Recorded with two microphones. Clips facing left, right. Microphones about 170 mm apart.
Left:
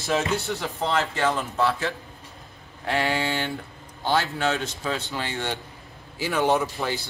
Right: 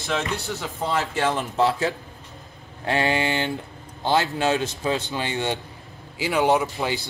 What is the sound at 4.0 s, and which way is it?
A man's voice, 20° right (ahead or behind).